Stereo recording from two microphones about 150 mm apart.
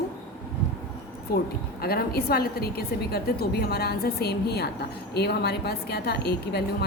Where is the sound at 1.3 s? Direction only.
90° left.